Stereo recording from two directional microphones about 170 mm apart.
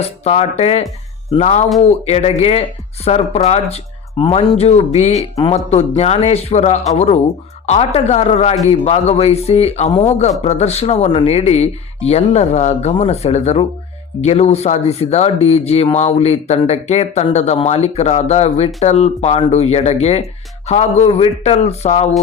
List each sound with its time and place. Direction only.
0.0 s speech: 35° left (ahead or behind)